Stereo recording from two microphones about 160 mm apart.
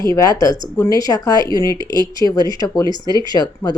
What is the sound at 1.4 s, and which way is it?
Speech, 25° right (ahead or behind).